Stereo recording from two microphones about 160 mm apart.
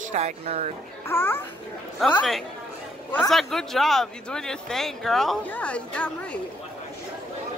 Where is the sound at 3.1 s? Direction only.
Centre (ahead or behind).